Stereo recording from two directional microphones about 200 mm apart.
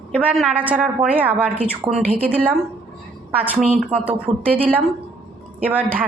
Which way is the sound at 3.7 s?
30° right (ahead or behind).